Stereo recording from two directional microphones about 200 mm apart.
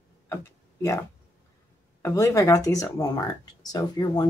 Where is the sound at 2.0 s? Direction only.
15° left (ahead or behind).